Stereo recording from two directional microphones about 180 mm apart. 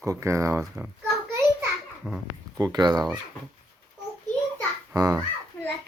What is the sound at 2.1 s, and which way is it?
Speech, centre (ahead or behind).